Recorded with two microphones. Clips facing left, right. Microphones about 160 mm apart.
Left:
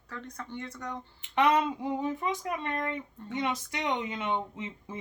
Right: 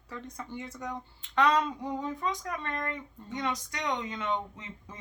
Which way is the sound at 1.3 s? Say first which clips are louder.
Left 1 dB; 25° left (ahead or behind).